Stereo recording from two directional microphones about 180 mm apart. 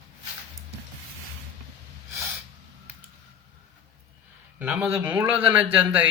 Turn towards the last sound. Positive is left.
turn(degrees=-10)  # may be behind; listen again after turning